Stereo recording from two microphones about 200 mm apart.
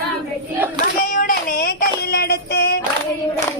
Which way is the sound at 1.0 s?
40° left (ahead or behind).